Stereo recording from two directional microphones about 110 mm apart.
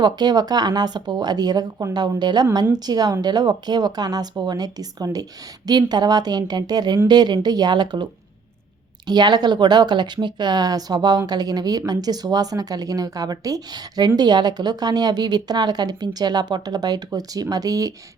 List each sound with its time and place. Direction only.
0.0 s speech: 40° right (ahead or behind)
9.0 s speech: 40° right (ahead or behind)